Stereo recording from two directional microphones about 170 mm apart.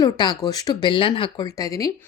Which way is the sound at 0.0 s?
25° left (ahead or behind).